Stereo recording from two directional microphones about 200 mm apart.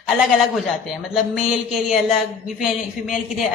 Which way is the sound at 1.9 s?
Centre (ahead or behind).